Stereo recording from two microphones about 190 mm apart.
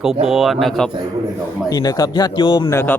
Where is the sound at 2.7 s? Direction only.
10° left (ahead or behind).